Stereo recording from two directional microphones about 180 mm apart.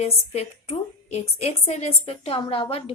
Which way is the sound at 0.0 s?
35° left (ahead or behind).